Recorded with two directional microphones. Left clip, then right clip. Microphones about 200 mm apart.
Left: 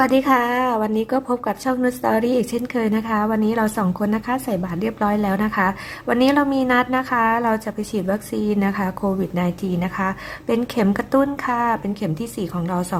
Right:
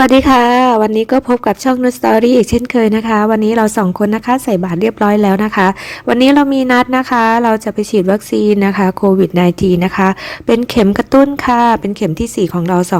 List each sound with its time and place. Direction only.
0.0 s a woman's voice: 35° right (ahead or behind)